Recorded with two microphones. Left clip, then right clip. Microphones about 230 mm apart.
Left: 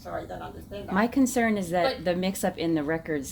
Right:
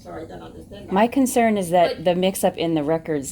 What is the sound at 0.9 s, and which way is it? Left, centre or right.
Speech, right.